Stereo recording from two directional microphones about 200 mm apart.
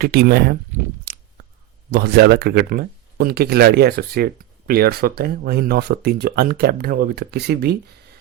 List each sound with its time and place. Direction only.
0.0 s speech: 50° right (ahead or behind)